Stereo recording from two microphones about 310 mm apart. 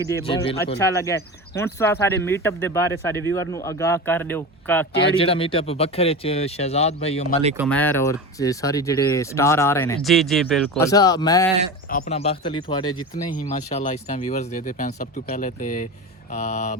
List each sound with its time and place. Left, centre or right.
0.3 s speech: centre
5.1 s speech: centre
7.5 s speech: centre; by 16.7 s left